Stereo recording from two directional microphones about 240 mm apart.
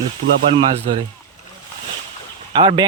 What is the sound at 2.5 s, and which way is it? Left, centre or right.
Speech, right.